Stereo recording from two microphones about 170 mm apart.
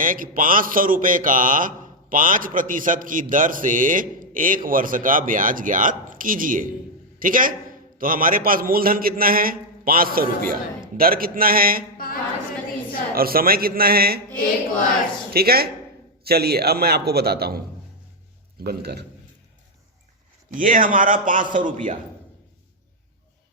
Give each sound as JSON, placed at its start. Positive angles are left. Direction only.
{"t": 0.0, "sound": "a man's voice", "side_deg": -55}
{"t": 12.0, "sound": "a sound", "side_deg": 55}
{"t": 13.1, "sound": "a man's voice", "side_deg": -60}
{"t": 15.3, "sound": "a man's voice", "side_deg": -65}
{"t": 18.6, "sound": "a man's voice", "side_deg": -70}
{"t": 20.5, "sound": "speech", "side_deg": -50}